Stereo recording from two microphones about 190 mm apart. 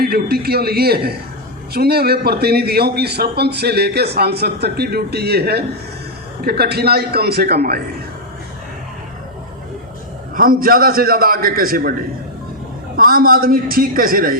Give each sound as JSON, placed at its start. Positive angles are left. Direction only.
{"t": 0.0, "sound": "a man's voice", "side_deg": -55}
{"t": 10.3, "sound": "a man's voice", "side_deg": -50}
{"t": 13.0, "sound": "a man's voice", "side_deg": -50}